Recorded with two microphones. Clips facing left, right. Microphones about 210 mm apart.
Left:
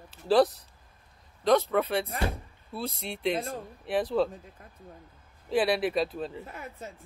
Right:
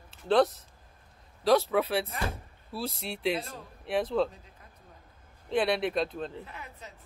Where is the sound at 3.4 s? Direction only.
45° left (ahead or behind).